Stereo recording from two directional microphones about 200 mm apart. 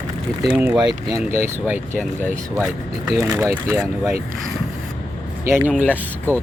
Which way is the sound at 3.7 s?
15° right (ahead or behind).